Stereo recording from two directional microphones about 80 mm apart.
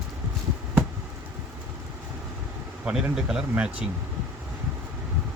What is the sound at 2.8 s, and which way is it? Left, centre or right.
Speech, centre.